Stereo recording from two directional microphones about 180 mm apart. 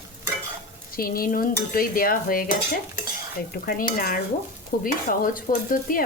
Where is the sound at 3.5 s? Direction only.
50° left (ahead or behind).